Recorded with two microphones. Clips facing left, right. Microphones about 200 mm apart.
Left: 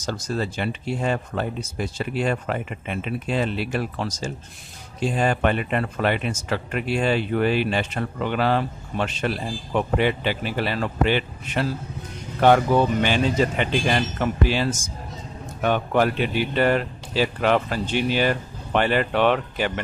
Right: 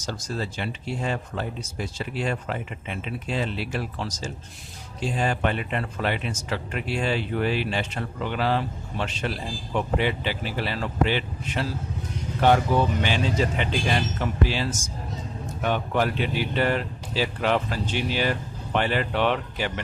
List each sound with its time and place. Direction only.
0.0 s speech: 55° left (ahead or behind)